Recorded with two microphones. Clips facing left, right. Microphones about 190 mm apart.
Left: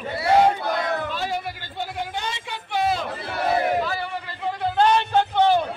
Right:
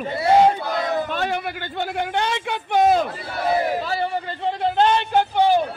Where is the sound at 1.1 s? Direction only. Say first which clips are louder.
Right 3 dB; 60° right (ahead or behind).